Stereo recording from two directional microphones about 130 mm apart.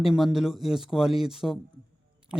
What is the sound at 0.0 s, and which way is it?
Speech, 5° right (ahead or behind).